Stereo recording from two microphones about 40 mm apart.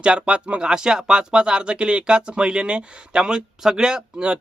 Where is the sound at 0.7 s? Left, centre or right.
Centre.